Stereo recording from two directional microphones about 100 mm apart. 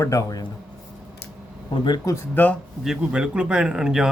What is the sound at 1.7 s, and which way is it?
Speech, 50° left (ahead or behind).